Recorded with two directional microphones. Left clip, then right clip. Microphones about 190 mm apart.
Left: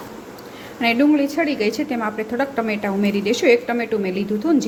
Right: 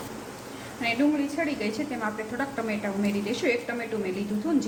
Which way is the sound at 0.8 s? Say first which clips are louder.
Left 9 dB; 55° left (ahead or behind).